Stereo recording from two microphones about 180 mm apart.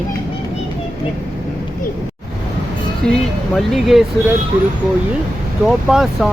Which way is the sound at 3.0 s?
5° left (ahead or behind).